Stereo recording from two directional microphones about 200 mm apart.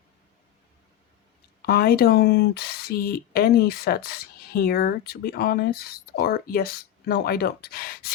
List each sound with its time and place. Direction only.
1.6 s speech: 50° left (ahead or behind)